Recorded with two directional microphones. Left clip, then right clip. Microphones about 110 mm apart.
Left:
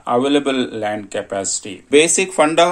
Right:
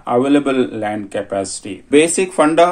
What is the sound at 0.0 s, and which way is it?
Speech, 30° left (ahead or behind).